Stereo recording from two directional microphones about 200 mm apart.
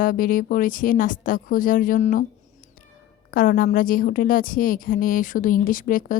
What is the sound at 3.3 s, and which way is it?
A woman's voice, 45° left (ahead or behind).